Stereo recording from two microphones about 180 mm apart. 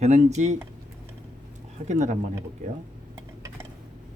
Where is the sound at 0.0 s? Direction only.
40° right (ahead or behind).